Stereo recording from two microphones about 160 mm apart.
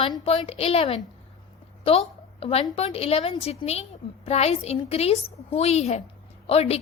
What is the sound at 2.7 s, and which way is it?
A woman's voice, 40° left (ahead or behind).